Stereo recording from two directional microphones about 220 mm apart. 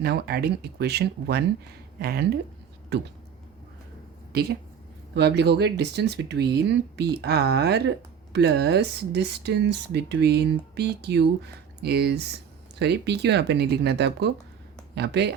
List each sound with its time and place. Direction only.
0.0 s speech: 45° right (ahead or behind)
5.1 s speech: 50° right (ahead or behind)